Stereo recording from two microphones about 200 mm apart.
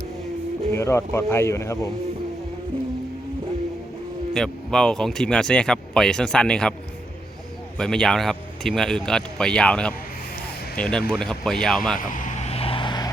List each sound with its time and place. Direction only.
0.7 s speech: 15° left (ahead or behind)
4.4 s speech: 5° left (ahead or behind)
7.8 s speech: 5° left (ahead or behind)
11.9 s vehicle: 40° left (ahead or behind); by 13.1 s 25° left (ahead or behind)